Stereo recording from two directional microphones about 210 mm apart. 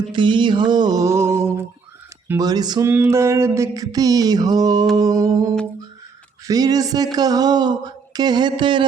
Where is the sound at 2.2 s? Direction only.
15° right (ahead or behind).